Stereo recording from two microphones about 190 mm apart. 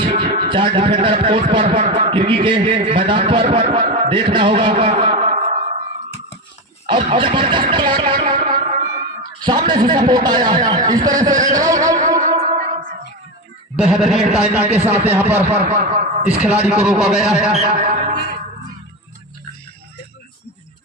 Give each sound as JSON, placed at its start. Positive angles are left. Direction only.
{"t": 0.0, "sound": "a man's voice", "side_deg": -30}
{"t": 6.8, "sound": "speech", "side_deg": -25}
{"t": 8.4, "sound": "music", "side_deg": -45}
{"t": 9.4, "sound": "a man's voice", "side_deg": -25}
{"t": 12.2, "sound": "music", "side_deg": -35}
{"t": 13.7, "sound": "a man's voice", "side_deg": -5}
{"t": 15.6, "sound": "speech", "side_deg": -45}
{"t": 16.4, "sound": "a man's voice", "side_deg": -5}
{"t": 17.6, "sound": "speech", "side_deg": -50}